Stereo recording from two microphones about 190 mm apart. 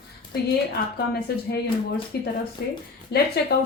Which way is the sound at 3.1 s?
60° left (ahead or behind).